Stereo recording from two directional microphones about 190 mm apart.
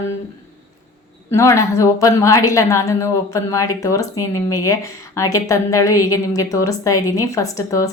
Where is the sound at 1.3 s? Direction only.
15° left (ahead or behind).